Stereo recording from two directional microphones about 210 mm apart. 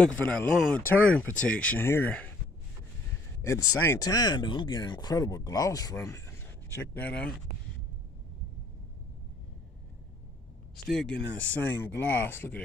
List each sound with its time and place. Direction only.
0.0 s speech: 5° left (ahead or behind)
3.4 s speech: 15° left (ahead or behind)
10.8 s speech: centre (ahead or behind)